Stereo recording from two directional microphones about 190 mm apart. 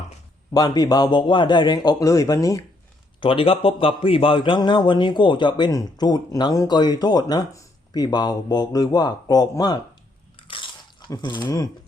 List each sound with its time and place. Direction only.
0.5 s a man's voice: 20° left (ahead or behind)
3.2 s a man's voice: 30° left (ahead or behind)
10.3 s chewing: 25° left (ahead or behind)
11.1 s a man's voice: 25° left (ahead or behind)